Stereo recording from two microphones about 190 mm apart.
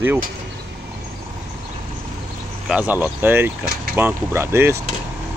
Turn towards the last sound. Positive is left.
turn(degrees=-15)  # may be behind; listen again after turning